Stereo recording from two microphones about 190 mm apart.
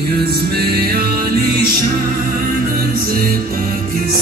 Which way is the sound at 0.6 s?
55° right (ahead or behind).